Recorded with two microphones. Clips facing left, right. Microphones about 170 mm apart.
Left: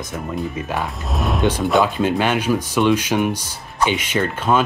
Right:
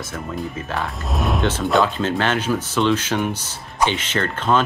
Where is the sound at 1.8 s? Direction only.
10° left (ahead or behind).